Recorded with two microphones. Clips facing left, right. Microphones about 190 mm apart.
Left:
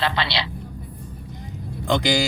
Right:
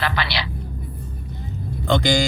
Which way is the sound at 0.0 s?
25° left (ahead or behind).